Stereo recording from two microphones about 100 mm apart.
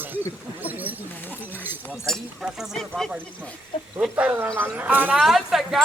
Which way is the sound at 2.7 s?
5° left (ahead or behind).